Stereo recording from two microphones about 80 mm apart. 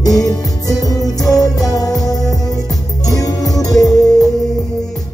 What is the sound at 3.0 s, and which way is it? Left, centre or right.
Music, left.